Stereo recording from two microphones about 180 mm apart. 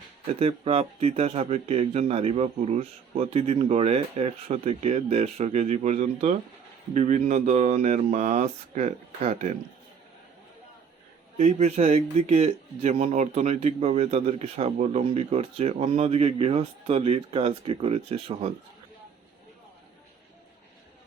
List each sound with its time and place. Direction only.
0.3 s speech: 35° right (ahead or behind)
11.3 s speech: 35° right (ahead or behind)